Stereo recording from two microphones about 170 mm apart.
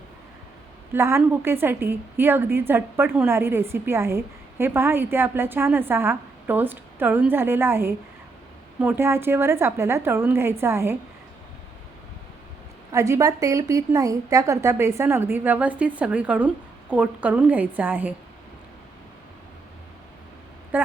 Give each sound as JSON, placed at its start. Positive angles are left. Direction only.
{"t": 0.9, "sound": "a woman's voice", "side_deg": -15}
{"t": 12.9, "sound": "a woman's voice", "side_deg": -20}
{"t": 20.7, "sound": "speech", "side_deg": -10}